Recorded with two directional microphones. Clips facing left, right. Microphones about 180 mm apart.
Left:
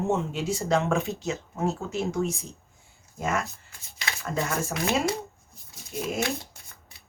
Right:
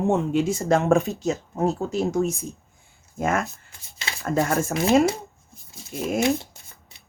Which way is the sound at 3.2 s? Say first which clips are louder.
Right 5 dB; 55° right (ahead or behind).